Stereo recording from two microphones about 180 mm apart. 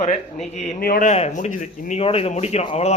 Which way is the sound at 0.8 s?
55° left (ahead or behind).